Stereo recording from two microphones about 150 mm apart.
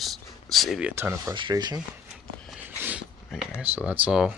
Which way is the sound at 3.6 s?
10° right (ahead or behind).